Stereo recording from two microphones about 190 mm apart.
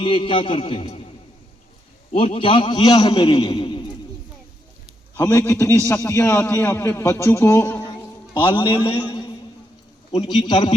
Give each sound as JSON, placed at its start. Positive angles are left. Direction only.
{"t": 0.0, "sound": "a man's voice", "side_deg": 30}
{"t": 2.1, "sound": "a man's voice", "side_deg": 30}
{"t": 3.5, "sound": "a sound", "side_deg": 25}
{"t": 5.1, "sound": "a man's voice", "side_deg": 15}
{"t": 8.6, "sound": "a man's voice", "side_deg": 25}
{"t": 10.5, "sound": "a man's voice", "side_deg": 25}